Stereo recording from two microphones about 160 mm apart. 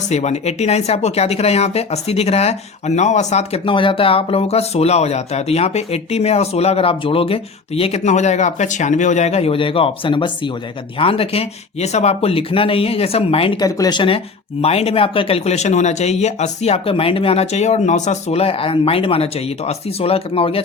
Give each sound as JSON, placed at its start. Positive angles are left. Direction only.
{"t": 0.1, "sound": "speech", "side_deg": 45}